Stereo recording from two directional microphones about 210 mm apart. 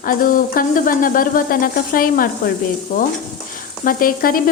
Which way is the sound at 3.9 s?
45° left (ahead or behind).